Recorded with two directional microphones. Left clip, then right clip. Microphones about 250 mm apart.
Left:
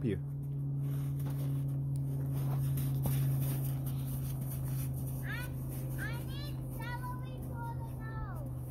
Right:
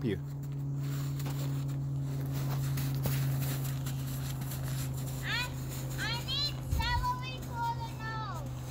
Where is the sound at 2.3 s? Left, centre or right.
Centre.